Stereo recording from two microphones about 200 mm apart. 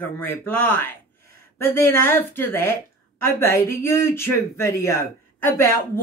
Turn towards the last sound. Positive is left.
turn(degrees=15)  # may be behind; listen again after turning